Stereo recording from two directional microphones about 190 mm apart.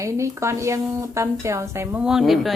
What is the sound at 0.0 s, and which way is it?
Speech, 15° right (ahead or behind).